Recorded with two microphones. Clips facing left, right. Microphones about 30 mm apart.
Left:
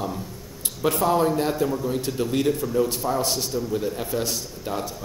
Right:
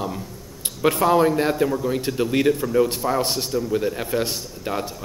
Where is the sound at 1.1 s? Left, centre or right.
Centre.